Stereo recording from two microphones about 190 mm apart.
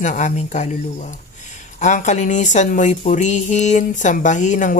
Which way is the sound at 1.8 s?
40° left (ahead or behind).